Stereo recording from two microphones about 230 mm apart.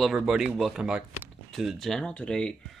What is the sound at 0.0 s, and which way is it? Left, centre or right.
Speech, centre.